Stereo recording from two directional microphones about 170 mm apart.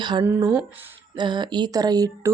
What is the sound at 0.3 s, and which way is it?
Speech, 10° right (ahead or behind).